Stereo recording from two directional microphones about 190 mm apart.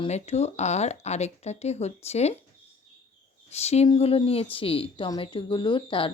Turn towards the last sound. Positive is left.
turn(degrees=25)  # may be behind; listen again after turning